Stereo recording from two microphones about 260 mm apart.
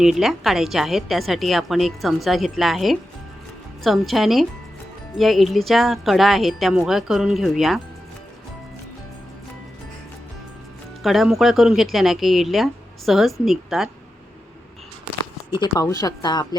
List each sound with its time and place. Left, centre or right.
0.0 s a woman's voice: centre
11.0 s a woman's voice: centre
15.4 s speech: centre